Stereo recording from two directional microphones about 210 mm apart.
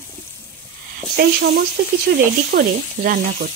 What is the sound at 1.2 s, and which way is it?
Speech, 50° right (ahead or behind).